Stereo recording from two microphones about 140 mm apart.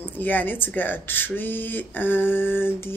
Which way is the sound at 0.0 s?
15° left (ahead or behind).